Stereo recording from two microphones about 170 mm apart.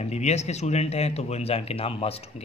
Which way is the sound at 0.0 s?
40° left (ahead or behind).